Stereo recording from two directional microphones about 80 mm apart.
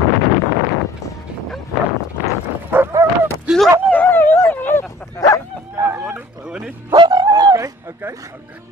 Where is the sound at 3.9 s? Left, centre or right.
Left.